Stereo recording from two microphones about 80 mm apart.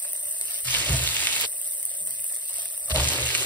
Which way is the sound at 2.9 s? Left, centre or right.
Centre.